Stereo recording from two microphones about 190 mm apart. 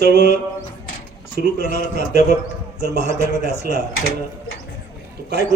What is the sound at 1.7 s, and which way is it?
Speech, 45° left (ahead or behind).